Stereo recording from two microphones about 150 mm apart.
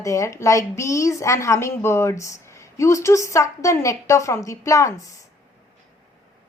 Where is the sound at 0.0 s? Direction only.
20° left (ahead or behind).